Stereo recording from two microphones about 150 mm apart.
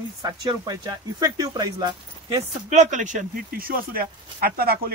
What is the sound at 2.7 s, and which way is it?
Speech, 55° right (ahead or behind).